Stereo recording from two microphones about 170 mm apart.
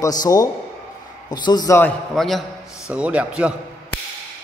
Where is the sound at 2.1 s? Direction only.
Centre (ahead or behind).